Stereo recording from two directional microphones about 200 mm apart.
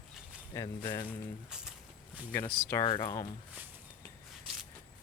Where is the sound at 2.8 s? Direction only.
25° left (ahead or behind).